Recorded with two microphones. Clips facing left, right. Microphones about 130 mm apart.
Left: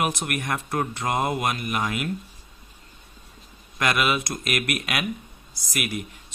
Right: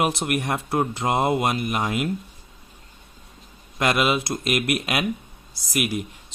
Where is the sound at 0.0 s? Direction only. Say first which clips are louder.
Right 3 dB; 30° right (ahead or behind).